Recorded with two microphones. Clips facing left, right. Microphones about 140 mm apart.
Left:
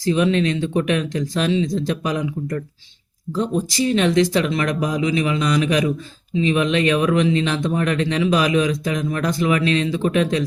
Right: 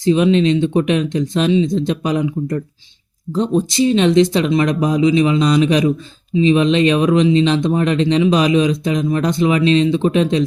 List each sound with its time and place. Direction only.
0.0 s speech: 20° right (ahead or behind)